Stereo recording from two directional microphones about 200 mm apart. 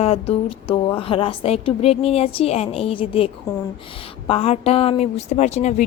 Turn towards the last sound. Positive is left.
turn(degrees=35)  # may be behind; listen again after turning